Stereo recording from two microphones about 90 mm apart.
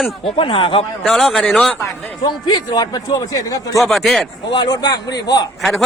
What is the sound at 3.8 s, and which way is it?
Speech, centre (ahead or behind).